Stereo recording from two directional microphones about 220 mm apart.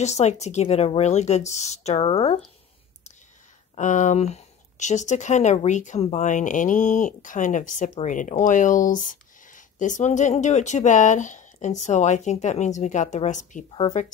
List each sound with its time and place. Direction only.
0.0 s speech: 30° left (ahead or behind)
3.7 s speech: 35° left (ahead or behind)
13.7 s speech: 25° left (ahead or behind)